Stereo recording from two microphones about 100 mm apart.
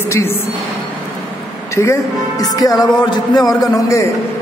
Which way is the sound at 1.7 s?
30° left (ahead or behind).